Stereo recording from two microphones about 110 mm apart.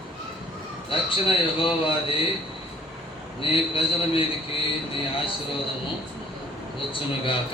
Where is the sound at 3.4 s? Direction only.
50° left (ahead or behind).